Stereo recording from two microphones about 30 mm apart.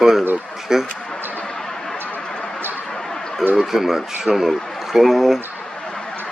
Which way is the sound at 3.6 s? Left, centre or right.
Centre.